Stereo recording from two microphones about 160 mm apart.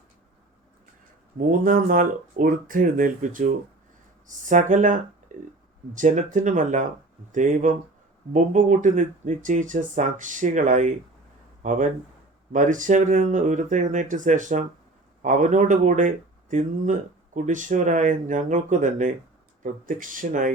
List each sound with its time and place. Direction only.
1.4 s speech: 55° right (ahead or behind)